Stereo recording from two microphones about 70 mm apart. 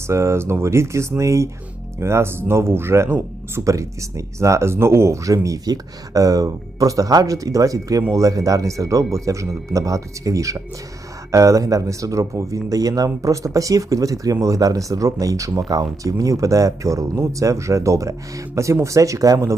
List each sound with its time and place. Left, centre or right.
0.1 s speech: right
3.6 s speech: right